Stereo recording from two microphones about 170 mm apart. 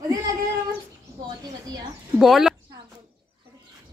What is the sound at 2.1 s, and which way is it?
Speech, centre (ahead or behind).